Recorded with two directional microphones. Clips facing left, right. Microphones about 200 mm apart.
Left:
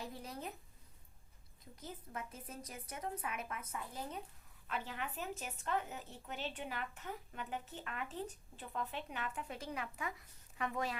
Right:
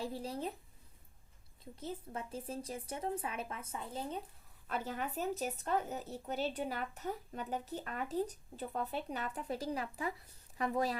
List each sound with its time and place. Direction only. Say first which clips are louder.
0.0 s speech: right 7 dB; 30° right (ahead or behind)
1.7 s speech: right 5 dB; 30° right (ahead or behind)
4.7 s speech: right 5 dB; 40° right (ahead or behind)